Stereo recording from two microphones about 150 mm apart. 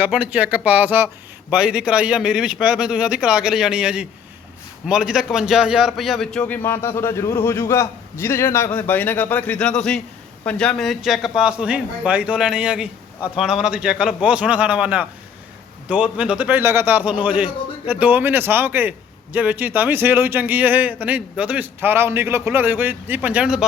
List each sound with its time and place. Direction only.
0.0 s a man's voice: 10° right (ahead or behind)
6.5 s a man's voice: 15° left (ahead or behind); by 23.6 s 5° right (ahead or behind)